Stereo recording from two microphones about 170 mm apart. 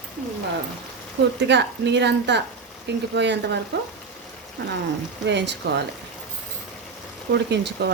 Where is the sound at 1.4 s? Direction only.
90° right.